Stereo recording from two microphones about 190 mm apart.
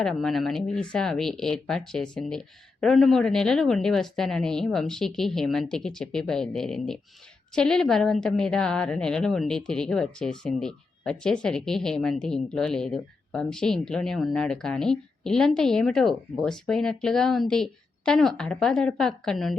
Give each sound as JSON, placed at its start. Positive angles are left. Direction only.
{"t": 0.0, "sound": "a woman's voice", "side_deg": 0}